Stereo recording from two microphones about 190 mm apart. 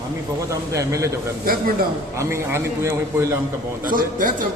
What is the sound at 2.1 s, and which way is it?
A man's voice, 15° right (ahead or behind).